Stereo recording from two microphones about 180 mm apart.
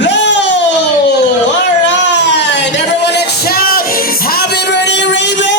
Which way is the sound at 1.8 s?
80° left.